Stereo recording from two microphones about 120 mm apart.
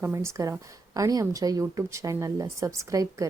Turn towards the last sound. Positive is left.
turn(degrees=-25)  # may be behind; listen again after turning